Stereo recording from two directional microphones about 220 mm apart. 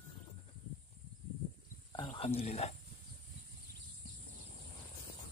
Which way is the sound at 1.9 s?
25° left (ahead or behind).